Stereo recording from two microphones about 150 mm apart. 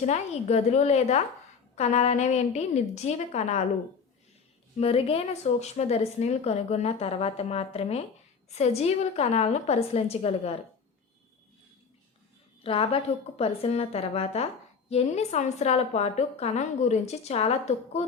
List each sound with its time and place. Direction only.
0.0 s a woman's voice: 50° left (ahead or behind)
4.8 s a woman's voice: 40° left (ahead or behind)
12.6 s a woman's voice: 40° left (ahead or behind)